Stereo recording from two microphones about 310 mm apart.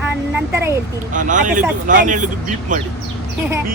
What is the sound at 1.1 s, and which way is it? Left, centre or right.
Speech, right.